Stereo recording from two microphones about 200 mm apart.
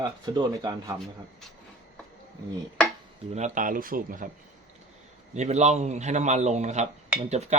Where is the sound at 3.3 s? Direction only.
35° right (ahead or behind).